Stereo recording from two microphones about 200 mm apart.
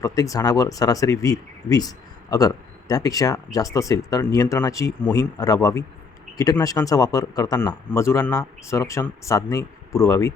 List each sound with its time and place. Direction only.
0.0 s speech: 15° left (ahead or behind)